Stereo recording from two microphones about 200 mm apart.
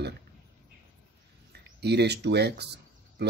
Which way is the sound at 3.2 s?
55° right (ahead or behind).